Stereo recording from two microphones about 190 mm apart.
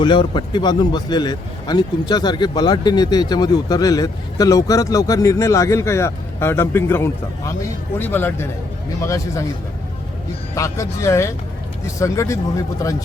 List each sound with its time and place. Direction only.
0.0 s speech: 25° left (ahead or behind)
10.5 s speech: 15° left (ahead or behind)